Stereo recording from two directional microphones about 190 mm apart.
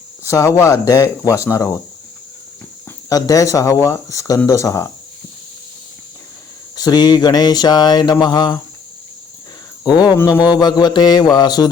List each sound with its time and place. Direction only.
0.6 s speech: 15° left (ahead or behind)
3.1 s speech: 20° left (ahead or behind)
6.7 s mantra: 20° left (ahead or behind)
9.8 s mantra: 20° left (ahead or behind)